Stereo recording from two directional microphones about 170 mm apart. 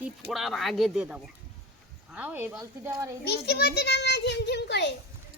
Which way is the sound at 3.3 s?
70° left (ahead or behind).